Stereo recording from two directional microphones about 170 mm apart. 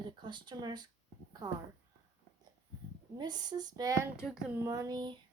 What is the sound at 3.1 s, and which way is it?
Speech, 25° right (ahead or behind).